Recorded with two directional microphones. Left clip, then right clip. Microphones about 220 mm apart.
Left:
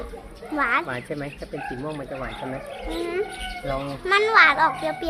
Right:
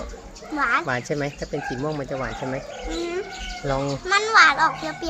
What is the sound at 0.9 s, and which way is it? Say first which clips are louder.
Speech: right 5 dB; 45° right (ahead or behind).